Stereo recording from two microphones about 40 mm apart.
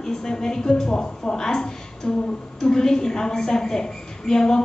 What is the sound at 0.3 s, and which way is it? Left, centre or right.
A woman's voice, centre.